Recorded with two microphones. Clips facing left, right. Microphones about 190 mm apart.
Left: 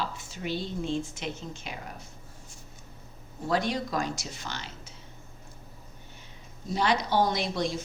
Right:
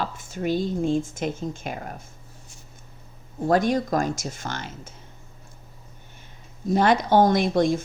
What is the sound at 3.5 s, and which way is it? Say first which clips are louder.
Speech: right 7 dB; 50° right (ahead or behind).